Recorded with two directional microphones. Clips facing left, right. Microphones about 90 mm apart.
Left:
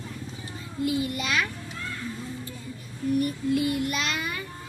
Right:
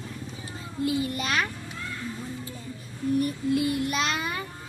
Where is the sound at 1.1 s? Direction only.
40° right (ahead or behind).